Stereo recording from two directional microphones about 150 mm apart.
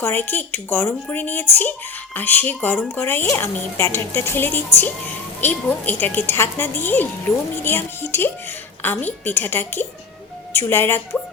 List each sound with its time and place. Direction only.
0.0 s speech: 15° left (ahead or behind)